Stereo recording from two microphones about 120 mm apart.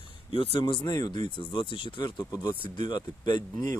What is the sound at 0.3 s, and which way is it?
Speech, 45° left (ahead or behind).